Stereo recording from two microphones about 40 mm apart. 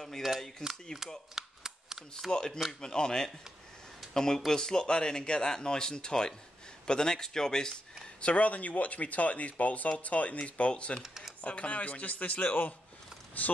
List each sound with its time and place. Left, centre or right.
0.2 s speech: centre
0.9 s speech: centre
1.3 s a sound: centre
2.3 s speech: left
8.2 s speech: left
11.0 s computer keyboard: centre
11.4 s speech: left